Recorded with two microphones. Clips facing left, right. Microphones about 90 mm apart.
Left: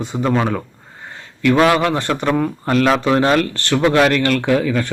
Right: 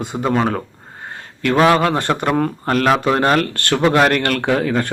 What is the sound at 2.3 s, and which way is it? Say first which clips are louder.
Speech: left 1 dB; 45° right (ahead or behind).